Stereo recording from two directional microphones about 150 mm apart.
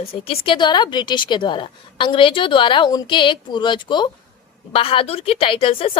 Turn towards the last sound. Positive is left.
turn(degrees=40)  # may be behind; listen again after turning